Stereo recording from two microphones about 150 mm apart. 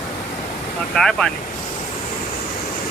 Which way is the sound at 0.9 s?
5° left (ahead or behind).